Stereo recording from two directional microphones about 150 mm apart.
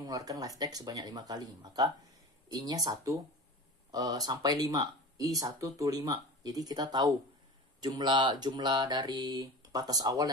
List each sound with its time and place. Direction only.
0.0 s speech: 25° right (ahead or behind)